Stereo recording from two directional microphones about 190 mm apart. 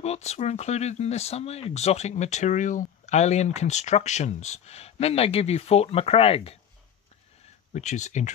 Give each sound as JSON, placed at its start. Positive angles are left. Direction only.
{"t": 0.0, "sound": "speech", "side_deg": 35}
{"t": 7.7, "sound": "speech", "side_deg": 40}